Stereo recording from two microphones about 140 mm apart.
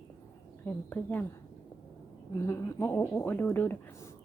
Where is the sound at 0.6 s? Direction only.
10° left (ahead or behind).